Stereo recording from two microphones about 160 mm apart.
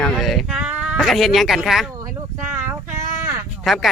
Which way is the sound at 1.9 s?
15° right (ahead or behind).